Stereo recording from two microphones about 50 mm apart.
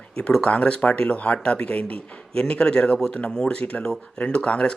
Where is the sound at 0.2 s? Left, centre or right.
Centre.